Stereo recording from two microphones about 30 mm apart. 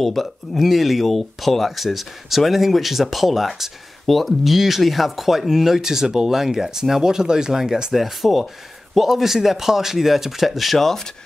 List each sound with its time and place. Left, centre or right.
0.0 s speech: centre
4.0 s speech: centre
7.9 s speech: centre